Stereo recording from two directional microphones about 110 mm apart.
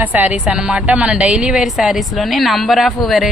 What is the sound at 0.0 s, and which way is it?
A woman's voice, 15° right (ahead or behind).